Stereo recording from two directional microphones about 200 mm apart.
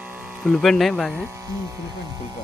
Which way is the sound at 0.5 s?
Centre (ahead or behind).